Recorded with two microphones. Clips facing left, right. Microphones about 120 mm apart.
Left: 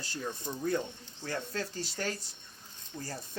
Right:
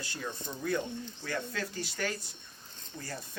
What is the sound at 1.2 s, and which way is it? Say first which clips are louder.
Speech: left 2 dB; 30° left (ahead or behind).